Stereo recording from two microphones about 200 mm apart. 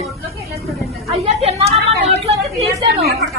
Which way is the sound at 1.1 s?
30° right (ahead or behind).